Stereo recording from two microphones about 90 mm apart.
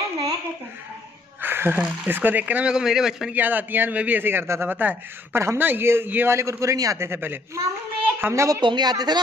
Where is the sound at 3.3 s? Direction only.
20° right (ahead or behind).